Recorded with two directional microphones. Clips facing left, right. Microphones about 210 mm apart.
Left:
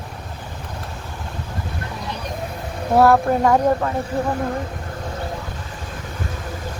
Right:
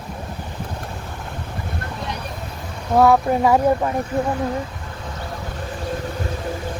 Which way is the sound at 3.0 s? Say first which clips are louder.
Even; centre (ahead or behind).